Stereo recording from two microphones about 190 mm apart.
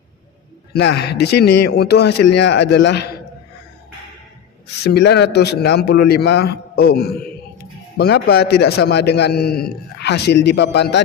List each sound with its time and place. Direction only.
0.7 s a man's voice: 60° left (ahead or behind)
4.8 s a man's voice: 60° left (ahead or behind)